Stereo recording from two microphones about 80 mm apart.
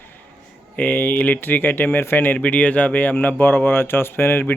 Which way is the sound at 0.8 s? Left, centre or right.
Left.